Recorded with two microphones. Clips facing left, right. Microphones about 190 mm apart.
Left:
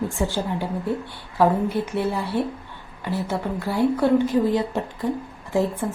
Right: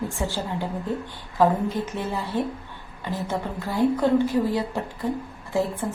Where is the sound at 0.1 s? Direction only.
15° left (ahead or behind).